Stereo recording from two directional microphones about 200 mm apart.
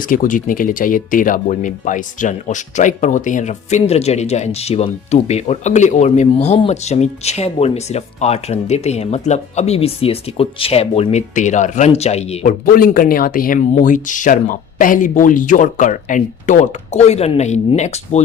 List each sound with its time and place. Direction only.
0.0 s speech: 40° left (ahead or behind)
12.6 s speech: 45° left (ahead or behind)